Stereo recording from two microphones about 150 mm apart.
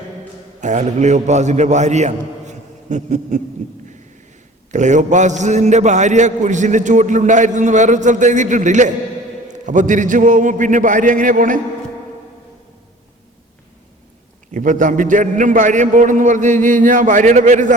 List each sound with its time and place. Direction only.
0.6 s a man's voice: 50° right (ahead or behind)
4.7 s a man's voice: 55° right (ahead or behind)
14.5 s a man's voice: 60° right (ahead or behind)